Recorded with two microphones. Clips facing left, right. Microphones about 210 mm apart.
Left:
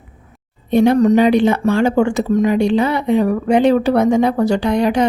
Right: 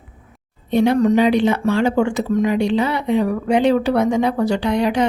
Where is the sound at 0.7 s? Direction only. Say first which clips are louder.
Left 3 dB; 45° left (ahead or behind).